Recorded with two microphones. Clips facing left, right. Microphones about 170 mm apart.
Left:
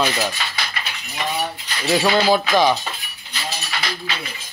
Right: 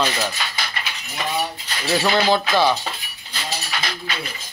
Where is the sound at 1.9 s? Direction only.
10° left (ahead or behind).